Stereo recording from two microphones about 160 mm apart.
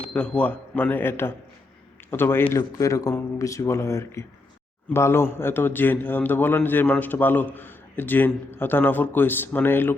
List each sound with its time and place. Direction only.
0.1 s a man's voice: 10° left (ahead or behind)